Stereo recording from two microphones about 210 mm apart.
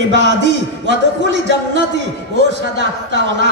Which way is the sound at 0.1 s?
60° right (ahead or behind).